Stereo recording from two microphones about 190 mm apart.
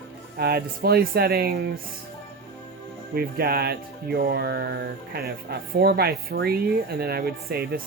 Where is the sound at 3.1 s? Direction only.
55° right (ahead or behind).